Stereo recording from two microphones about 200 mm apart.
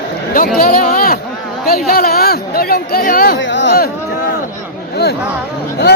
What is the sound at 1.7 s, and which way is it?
A woman's voice, 50° left (ahead or behind).